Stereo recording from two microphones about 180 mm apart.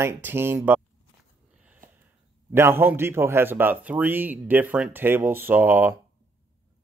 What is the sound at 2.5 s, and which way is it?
Speech, 15° right (ahead or behind).